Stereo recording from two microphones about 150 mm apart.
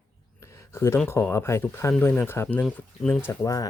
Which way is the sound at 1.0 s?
15° left (ahead or behind).